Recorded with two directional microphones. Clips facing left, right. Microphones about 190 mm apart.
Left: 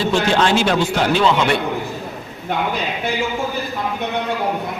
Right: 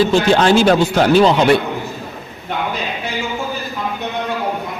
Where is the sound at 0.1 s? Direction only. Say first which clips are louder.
Right 4 dB; 40° right (ahead or behind).